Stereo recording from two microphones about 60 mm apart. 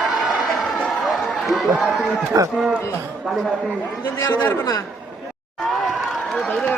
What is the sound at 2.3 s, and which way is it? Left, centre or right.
Speech, right.